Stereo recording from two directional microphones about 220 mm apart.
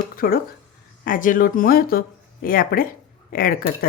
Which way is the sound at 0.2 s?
40° left (ahead or behind).